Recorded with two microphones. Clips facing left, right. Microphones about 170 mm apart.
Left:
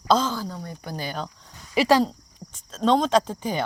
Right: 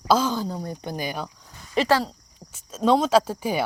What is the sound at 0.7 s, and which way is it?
Speech, 20° right (ahead or behind).